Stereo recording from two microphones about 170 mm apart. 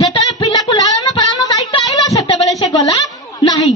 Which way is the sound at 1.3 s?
20° left (ahead or behind).